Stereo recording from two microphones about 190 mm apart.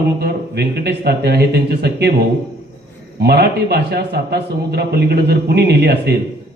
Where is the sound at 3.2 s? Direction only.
60° right (ahead or behind).